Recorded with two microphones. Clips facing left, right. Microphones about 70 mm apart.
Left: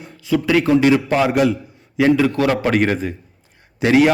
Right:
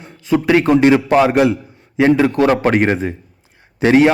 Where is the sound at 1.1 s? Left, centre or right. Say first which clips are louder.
Right 4 dB; right.